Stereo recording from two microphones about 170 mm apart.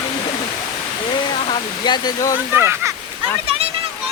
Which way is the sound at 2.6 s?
15° right (ahead or behind).